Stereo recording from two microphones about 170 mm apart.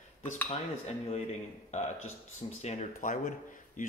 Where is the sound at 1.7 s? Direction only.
45° left (ahead or behind).